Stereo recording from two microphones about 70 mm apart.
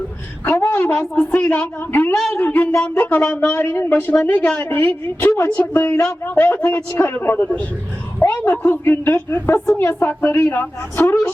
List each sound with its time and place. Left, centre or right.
0.7 s a woman's voice: left
4.4 s a woman's voice: centre
4.6 s a woman's voice: left